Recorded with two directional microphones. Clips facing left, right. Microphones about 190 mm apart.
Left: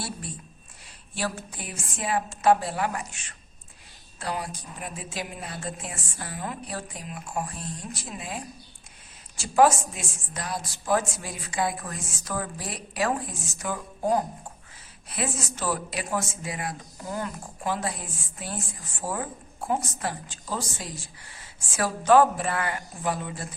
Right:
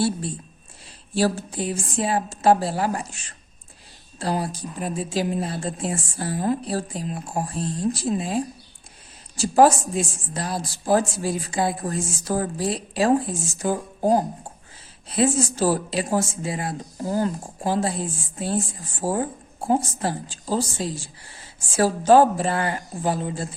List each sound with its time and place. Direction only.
0.0 s speech: 30° right (ahead or behind)